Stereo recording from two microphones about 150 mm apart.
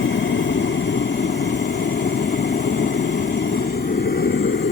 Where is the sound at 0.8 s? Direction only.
90° left.